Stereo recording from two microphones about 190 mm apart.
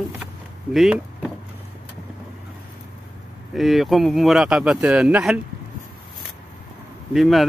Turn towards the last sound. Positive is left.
turn(degrees=0)  # may be behind; listen again after turning